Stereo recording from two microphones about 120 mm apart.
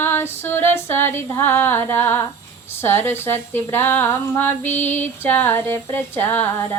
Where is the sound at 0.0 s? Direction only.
20° left (ahead or behind).